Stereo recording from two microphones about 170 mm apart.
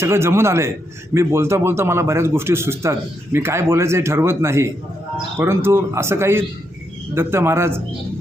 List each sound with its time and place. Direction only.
0.0 s speech: 15° right (ahead or behind)